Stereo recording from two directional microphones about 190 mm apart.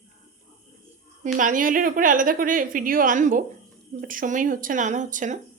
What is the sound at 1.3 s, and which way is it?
A woman's voice, 45° right (ahead or behind).